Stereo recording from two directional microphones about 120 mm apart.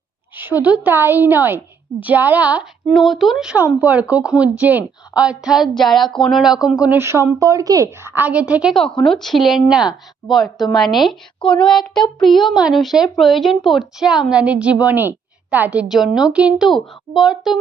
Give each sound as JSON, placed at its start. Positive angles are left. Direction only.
{"t": 0.3, "sound": "a woman's voice", "side_deg": -15}
{"t": 2.8, "sound": "a woman's voice", "side_deg": 0}
{"t": 7.0, "sound": "speech", "side_deg": -20}
{"t": 7.9, "sound": "a woman's voice", "side_deg": -20}
{"t": 8.7, "sound": "a woman's voice", "side_deg": 5}